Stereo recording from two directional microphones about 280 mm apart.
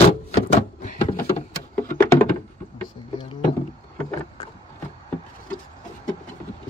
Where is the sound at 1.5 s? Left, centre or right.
Centre.